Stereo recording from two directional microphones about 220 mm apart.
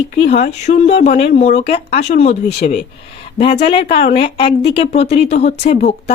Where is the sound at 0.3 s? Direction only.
30° left (ahead or behind).